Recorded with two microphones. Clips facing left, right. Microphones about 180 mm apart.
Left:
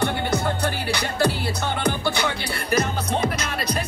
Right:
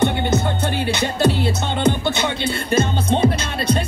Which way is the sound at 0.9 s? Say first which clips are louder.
Right 5 dB; 20° right (ahead or behind).